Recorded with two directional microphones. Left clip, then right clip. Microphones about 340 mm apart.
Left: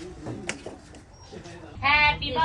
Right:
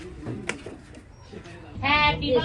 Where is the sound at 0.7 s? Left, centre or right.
Left.